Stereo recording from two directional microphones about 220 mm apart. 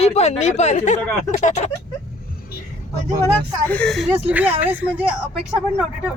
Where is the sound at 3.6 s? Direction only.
5° left (ahead or behind).